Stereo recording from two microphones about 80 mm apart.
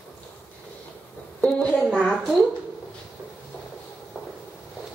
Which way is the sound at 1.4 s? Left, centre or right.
Centre.